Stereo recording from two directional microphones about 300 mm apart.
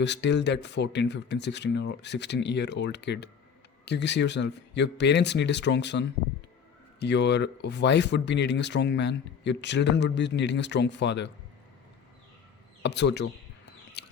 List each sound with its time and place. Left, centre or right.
0.0 s speech: left
12.8 s speech: left
14.0 s a sound: left